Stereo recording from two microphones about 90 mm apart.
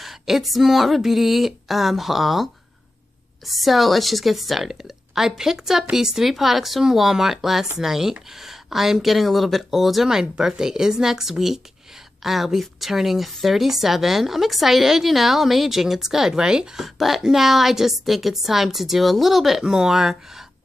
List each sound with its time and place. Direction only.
0.0 s speech: centre (ahead or behind)